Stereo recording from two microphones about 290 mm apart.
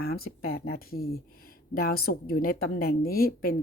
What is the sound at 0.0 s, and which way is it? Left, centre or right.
A woman's voice, left.